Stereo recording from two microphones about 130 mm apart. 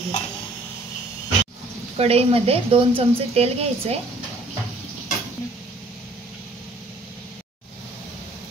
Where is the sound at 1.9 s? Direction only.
50° right (ahead or behind).